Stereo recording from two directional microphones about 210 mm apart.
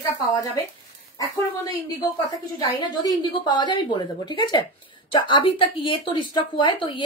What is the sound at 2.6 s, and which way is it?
Speech, 20° left (ahead or behind).